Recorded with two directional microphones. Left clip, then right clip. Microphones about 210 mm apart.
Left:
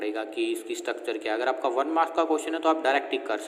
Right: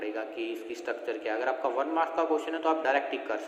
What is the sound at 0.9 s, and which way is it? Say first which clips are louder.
A man's voice: left 2 dB; 50° left (ahead or behind).